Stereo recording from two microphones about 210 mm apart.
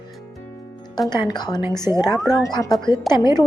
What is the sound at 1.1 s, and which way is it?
A woman's voice, 20° left (ahead or behind).